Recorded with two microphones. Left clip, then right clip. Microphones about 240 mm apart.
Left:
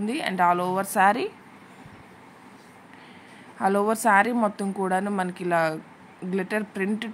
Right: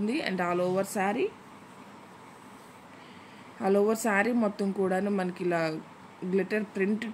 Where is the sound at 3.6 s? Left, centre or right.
Centre.